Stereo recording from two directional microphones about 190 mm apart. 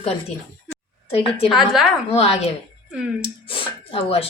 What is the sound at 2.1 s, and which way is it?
Speech, 35° left (ahead or behind).